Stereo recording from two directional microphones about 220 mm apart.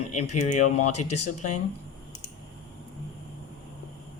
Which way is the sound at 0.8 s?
90° left.